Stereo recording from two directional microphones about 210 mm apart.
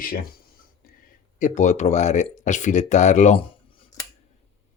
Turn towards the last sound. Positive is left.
turn(degrees=25)  # may be behind; listen again after turning